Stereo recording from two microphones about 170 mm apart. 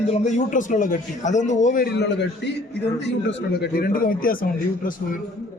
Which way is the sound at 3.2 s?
65° left (ahead or behind).